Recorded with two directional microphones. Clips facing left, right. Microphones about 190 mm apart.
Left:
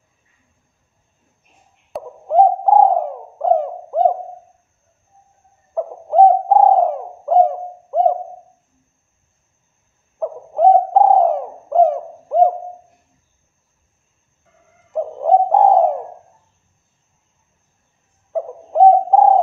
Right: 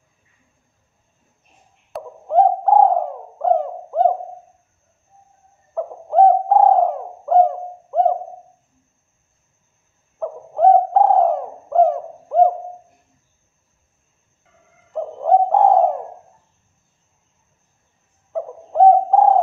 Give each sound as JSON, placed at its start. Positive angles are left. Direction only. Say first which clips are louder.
{"t": 1.9, "sound": "a sound", "louder": "left 3 dB", "side_deg": 0}
{"t": 2.3, "sound": "bird", "louder": "left 2 dB", "side_deg": 10}
{"t": 5.8, "sound": "bird", "louder": "left 2 dB", "side_deg": 15}
{"t": 10.1, "sound": "bird", "louder": "left 3 dB", "side_deg": 15}
{"t": 14.9, "sound": "bird", "louder": "left 2 dB", "side_deg": 15}
{"t": 18.3, "sound": "bird", "louder": "left 3 dB", "side_deg": 15}